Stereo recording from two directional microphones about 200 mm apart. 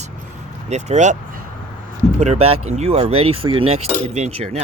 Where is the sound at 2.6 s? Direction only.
35° right (ahead or behind).